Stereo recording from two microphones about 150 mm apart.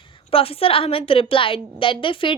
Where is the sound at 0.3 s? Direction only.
40° left (ahead or behind).